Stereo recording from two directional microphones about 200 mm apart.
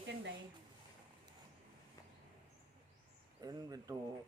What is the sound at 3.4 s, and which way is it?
Speech, 20° right (ahead or behind).